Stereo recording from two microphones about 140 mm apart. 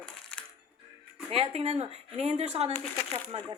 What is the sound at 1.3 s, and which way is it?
Speech, 45° right (ahead or behind).